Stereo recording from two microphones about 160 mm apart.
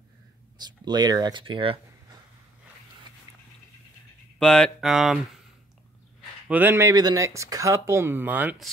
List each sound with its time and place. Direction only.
0.6 s speech: 25° right (ahead or behind)
4.4 s speech: 5° left (ahead or behind)
6.4 s speech: 10° right (ahead or behind)